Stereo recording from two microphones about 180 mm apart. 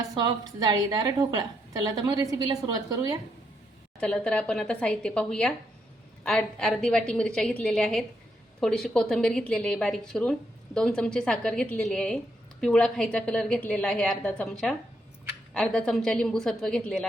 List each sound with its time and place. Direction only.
0.0 s a woman's voice: 20° right (ahead or behind)
4.0 s a woman's voice: 5° left (ahead or behind)
15.5 s a woman's voice: 5° left (ahead or behind)